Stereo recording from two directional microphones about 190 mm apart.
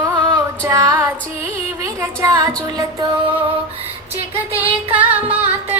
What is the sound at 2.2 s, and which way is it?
Music, 20° right (ahead or behind).